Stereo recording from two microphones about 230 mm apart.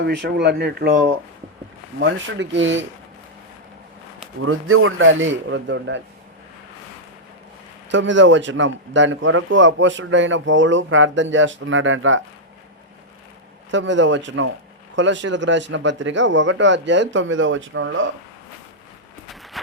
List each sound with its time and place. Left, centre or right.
0.0 s speech: right
4.4 s a man's voice: right
7.9 s a man's voice: right
13.7 s speech: right